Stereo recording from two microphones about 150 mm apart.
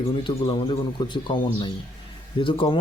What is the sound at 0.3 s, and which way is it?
Speech, 35° left (ahead or behind).